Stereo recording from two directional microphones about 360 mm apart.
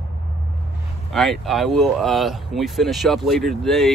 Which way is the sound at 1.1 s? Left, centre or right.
Centre.